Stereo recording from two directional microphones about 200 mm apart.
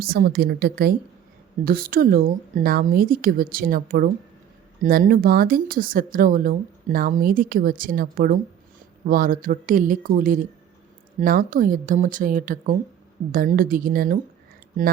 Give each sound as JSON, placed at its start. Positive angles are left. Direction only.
{"t": 0.0, "sound": "a woman's voice", "side_deg": -50}